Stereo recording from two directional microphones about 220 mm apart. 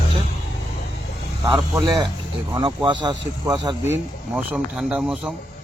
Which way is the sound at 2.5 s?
20° right (ahead or behind).